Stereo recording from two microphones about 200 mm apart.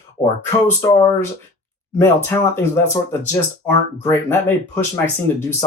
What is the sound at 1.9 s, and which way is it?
Speech, 10° left (ahead or behind).